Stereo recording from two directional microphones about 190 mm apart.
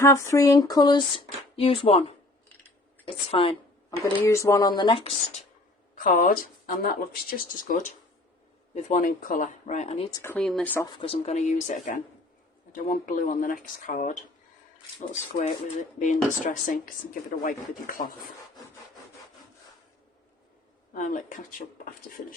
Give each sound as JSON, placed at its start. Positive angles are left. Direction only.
{"t": 0.0, "sound": "speech", "side_deg": 15}
{"t": 4.0, "sound": "speech", "side_deg": 15}
{"t": 6.0, "sound": "speech", "side_deg": 45}
{"t": 10.1, "sound": "speech", "side_deg": 15}
{"t": 10.9, "sound": "speech", "side_deg": 30}
{"t": 15.8, "sound": "speech", "side_deg": 40}
{"t": 20.9, "sound": "speech", "side_deg": 45}